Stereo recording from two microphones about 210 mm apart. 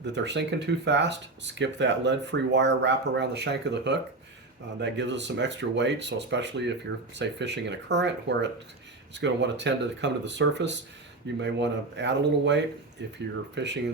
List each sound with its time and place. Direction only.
0.0 s speech: 55° right (ahead or behind)